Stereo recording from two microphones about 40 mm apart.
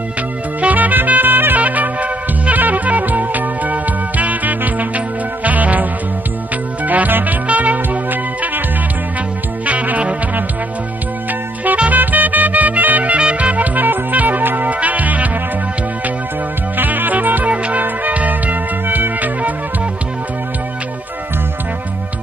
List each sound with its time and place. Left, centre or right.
0.6 s music: right
1.6 s music: right
7.4 s music: right
9.7 s music: right
11.9 s music: right
14.7 s music: right
16.7 s music: right
17.5 s music: right